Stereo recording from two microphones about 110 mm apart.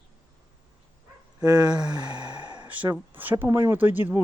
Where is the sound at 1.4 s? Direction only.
35° right (ahead or behind).